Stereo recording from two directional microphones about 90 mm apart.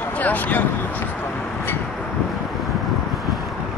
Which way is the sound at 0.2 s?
20° left (ahead or behind).